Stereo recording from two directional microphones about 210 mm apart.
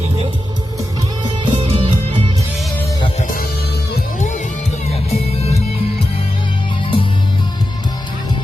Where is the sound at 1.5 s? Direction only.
25° right (ahead or behind).